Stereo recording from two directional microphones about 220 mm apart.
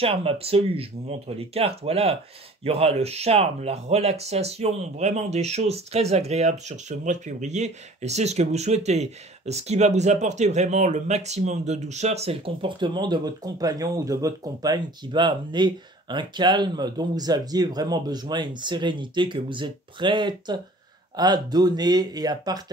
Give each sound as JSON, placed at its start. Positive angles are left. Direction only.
{"t": 0.0, "sound": "speech", "side_deg": -25}